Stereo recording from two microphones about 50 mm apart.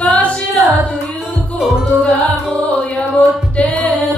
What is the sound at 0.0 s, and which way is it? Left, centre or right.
Singing, left.